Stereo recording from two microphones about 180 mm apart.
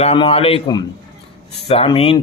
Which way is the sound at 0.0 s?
30° left (ahead or behind).